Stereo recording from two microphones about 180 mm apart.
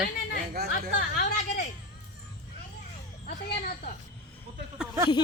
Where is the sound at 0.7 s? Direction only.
45° left (ahead or behind).